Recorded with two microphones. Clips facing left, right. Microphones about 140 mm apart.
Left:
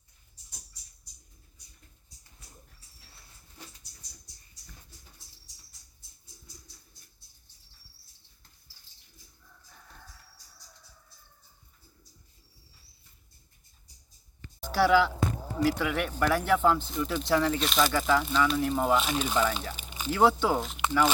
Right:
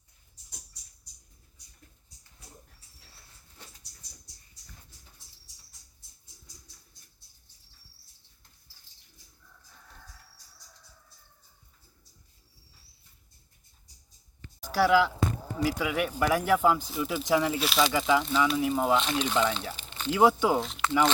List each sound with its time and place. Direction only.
14.6 s speech: centre (ahead or behind)
19.7 s a sound: 10° left (ahead or behind)
20.1 s speech: 10° right (ahead or behind)
20.6 s speech: 5° left (ahead or behind)